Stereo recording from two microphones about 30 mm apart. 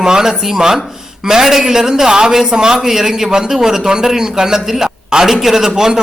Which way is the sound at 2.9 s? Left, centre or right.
Centre.